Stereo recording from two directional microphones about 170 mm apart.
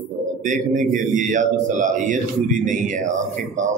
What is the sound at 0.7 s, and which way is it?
Speech, 50° right (ahead or behind).